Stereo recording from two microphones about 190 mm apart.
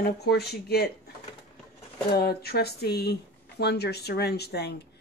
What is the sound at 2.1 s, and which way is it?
Speech, 55° left (ahead or behind).